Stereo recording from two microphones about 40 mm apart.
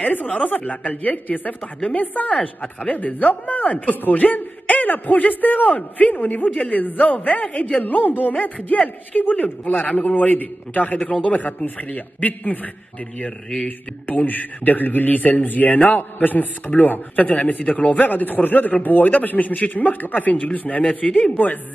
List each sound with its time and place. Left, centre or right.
0.1 s a woman's voice: left
6.7 s a woman's voice: left
7.8 s a man's voice: left
13.7 s a man's voice: left